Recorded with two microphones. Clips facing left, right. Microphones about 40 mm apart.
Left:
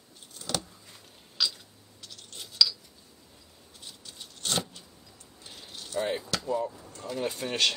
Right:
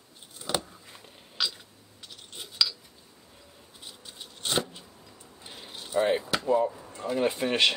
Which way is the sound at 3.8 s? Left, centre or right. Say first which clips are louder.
Right 1 dB; centre.